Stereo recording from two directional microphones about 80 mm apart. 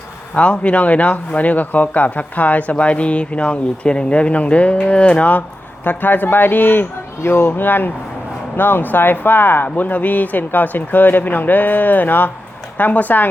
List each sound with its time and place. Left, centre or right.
0.3 s a man's voice: centre